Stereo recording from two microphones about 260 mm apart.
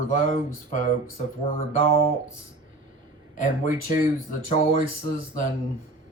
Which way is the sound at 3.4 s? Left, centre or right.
Left.